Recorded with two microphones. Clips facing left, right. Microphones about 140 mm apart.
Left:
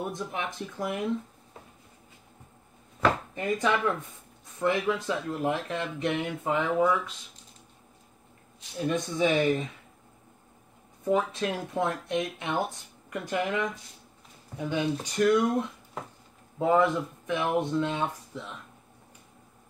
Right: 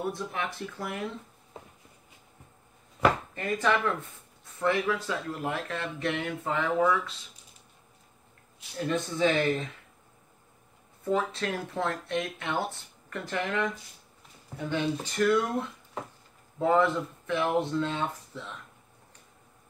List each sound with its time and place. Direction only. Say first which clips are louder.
0.1 s speech: even; 20° left (ahead or behind)
3.3 s speech: even; 15° left (ahead or behind)
8.7 s speech: left 1 dB; 15° left (ahead or behind)
11.1 s speech: left 2 dB; 15° left (ahead or behind)
16.5 s speech: left 1 dB; 15° left (ahead or behind)